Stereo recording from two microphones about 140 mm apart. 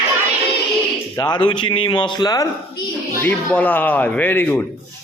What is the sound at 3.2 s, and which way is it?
Speech, 10° left (ahead or behind).